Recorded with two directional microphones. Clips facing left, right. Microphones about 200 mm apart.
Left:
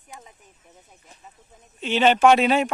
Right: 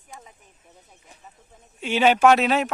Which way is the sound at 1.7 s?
10° right (ahead or behind).